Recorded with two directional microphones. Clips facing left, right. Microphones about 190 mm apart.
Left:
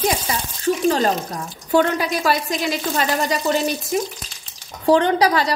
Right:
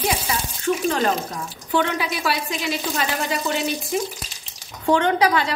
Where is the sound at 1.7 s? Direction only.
40° left (ahead or behind).